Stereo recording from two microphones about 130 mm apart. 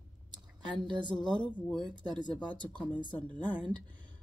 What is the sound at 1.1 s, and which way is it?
Speech, 5° left (ahead or behind).